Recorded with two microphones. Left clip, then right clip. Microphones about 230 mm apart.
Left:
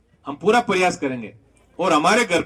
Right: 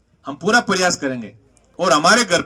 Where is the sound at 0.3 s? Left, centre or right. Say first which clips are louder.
Right 1 dB; right.